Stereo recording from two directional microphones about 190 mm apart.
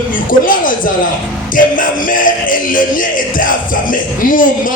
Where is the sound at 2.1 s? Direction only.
45° left (ahead or behind).